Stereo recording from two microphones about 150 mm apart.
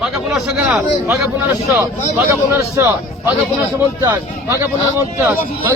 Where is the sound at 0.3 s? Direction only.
5° right (ahead or behind).